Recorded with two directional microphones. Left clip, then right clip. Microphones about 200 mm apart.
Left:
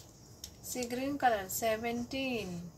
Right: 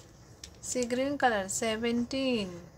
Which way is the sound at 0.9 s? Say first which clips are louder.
Right 2 dB; 35° right (ahead or behind).